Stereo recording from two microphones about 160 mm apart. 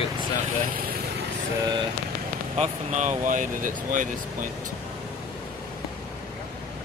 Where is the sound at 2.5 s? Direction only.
45° right (ahead or behind).